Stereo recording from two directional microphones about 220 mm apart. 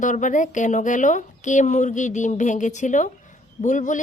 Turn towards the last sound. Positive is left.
turn(degrees=35)  # may be behind; listen again after turning